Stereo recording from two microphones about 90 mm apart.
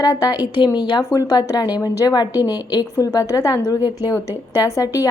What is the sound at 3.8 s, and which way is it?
Speech, 20° right (ahead or behind).